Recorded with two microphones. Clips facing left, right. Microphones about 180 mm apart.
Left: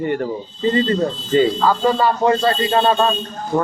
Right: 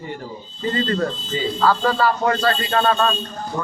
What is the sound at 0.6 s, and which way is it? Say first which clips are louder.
Speech: left 4 dB; 20° left (ahead or behind).